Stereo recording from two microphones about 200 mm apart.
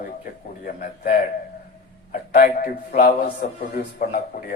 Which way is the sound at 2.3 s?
45° left (ahead or behind).